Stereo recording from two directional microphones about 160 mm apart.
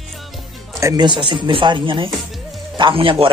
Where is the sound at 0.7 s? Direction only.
20° right (ahead or behind).